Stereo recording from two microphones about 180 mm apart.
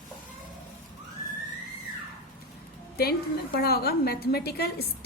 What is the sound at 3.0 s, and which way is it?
A woman's voice, 60° left (ahead or behind).